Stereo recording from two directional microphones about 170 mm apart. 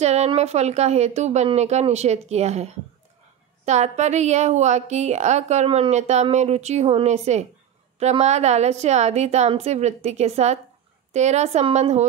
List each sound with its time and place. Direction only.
0.0 s a woman's voice: 40° right (ahead or behind)